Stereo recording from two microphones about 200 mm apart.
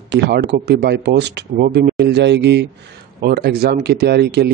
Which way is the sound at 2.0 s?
60° right (ahead or behind).